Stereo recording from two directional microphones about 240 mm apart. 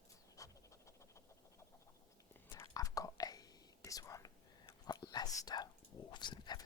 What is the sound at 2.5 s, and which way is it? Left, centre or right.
Whispering, centre.